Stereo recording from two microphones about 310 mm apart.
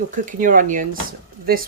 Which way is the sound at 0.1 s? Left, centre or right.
Right.